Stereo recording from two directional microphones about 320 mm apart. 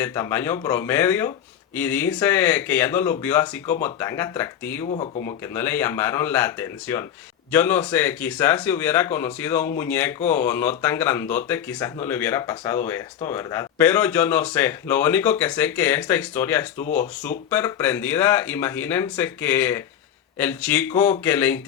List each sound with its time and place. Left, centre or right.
0.0 s speech: centre
4.9 s speech: centre
5.5 s speech: centre